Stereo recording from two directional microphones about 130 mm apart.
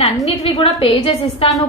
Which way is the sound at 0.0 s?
45° left (ahead or behind).